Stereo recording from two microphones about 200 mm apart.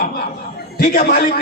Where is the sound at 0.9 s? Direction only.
45° left (ahead or behind).